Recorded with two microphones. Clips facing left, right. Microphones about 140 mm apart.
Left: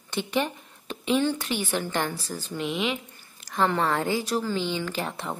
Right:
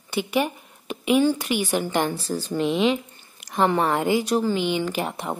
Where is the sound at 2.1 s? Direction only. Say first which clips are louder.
Right 7 dB; 35° right (ahead or behind).